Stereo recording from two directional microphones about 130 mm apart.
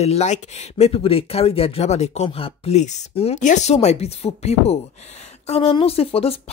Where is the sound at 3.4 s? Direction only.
70° left (ahead or behind).